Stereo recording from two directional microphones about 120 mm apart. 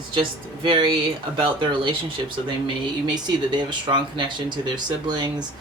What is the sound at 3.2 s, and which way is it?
Speech, 40° right (ahead or behind).